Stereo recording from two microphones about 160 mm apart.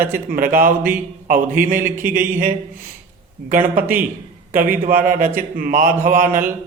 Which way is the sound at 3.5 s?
60° right (ahead or behind).